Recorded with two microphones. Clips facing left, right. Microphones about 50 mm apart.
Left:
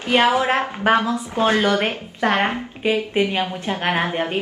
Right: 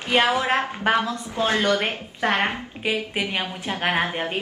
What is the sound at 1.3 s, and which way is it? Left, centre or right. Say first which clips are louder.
Speech: left 3 dB; left.